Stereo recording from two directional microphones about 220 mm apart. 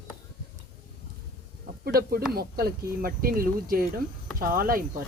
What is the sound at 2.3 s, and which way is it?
Speech, 45° right (ahead or behind).